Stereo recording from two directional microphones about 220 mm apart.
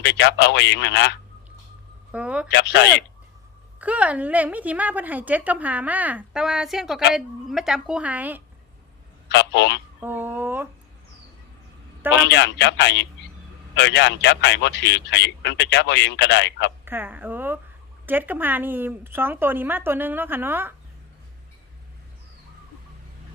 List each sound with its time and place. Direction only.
0.0 s a man's voice: 50° left (ahead or behind)
2.1 s a sound: 5° right (ahead or behind)
2.5 s a man's voice: 50° left (ahead or behind)
3.8 s a woman's voice: 5° right (ahead or behind)
9.3 s a man's voice: 50° left (ahead or behind)
10.0 s speech: 10° right (ahead or behind)
12.1 s a man's voice: 55° left (ahead or behind)
16.8 s a woman's voice: 10° right (ahead or behind)